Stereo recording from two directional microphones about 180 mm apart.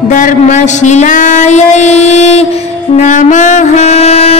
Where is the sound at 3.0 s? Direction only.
45° left (ahead or behind).